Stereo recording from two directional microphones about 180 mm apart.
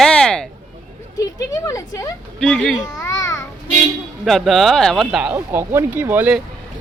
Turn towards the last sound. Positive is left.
turn(degrees=-10)  # may be behind; listen again after turning